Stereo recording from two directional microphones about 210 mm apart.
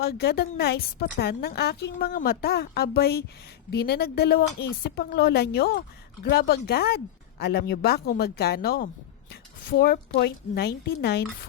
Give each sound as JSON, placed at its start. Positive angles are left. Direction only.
{"t": 0.0, "sound": "a woman's voice", "side_deg": 50}